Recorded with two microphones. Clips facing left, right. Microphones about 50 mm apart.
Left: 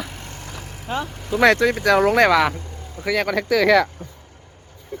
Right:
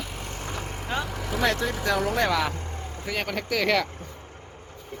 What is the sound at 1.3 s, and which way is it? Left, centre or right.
Speech, left.